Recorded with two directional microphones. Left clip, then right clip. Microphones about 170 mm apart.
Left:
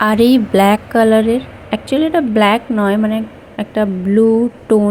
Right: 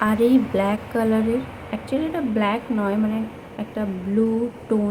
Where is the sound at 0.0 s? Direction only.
45° left (ahead or behind).